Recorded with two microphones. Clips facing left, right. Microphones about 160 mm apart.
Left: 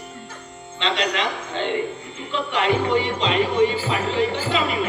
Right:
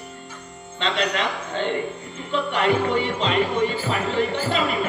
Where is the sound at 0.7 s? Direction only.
45° right (ahead or behind).